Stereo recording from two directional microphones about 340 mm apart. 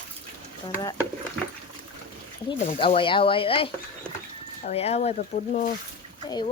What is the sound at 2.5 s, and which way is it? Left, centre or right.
Speech, centre.